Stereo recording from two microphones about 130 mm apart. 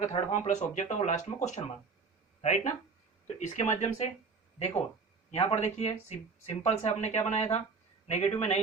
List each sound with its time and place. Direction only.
0.0 s speech: 65° left (ahead or behind)
5.3 s speech: 55° left (ahead or behind)